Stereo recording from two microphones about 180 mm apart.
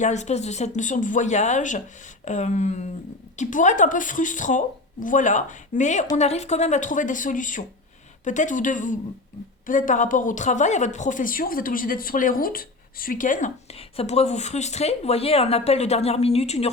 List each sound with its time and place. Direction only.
0.0 s a woman's voice: 40° left (ahead or behind)